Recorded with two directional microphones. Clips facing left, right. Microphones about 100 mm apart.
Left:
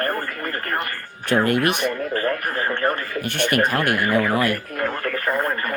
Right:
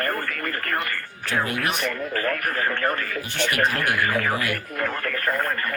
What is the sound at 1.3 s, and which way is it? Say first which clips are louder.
Speech: left 6 dB; 60° left (ahead or behind).